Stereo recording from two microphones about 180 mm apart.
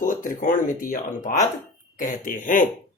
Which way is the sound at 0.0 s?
45° left (ahead or behind).